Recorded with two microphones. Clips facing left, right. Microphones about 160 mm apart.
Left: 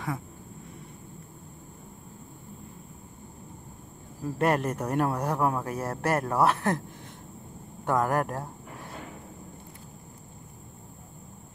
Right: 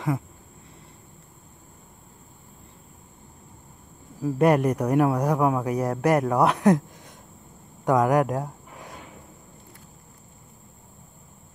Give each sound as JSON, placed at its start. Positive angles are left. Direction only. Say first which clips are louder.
{"t": 4.2, "sound": "speech", "louder": "right 6 dB", "side_deg": -15}
{"t": 7.8, "sound": "speech", "louder": "right 6 dB", "side_deg": -15}